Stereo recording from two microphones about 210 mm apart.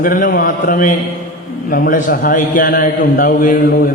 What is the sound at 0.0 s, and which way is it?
A man's voice, 40° left (ahead or behind).